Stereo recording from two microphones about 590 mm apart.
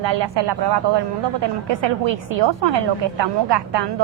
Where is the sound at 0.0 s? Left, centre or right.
Right.